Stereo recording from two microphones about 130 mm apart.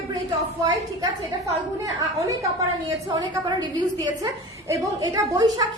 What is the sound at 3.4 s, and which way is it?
A woman's voice, 35° right (ahead or behind).